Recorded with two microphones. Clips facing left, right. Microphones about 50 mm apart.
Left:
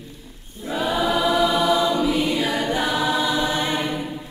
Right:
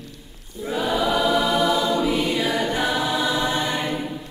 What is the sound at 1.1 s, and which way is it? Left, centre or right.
Choir, centre.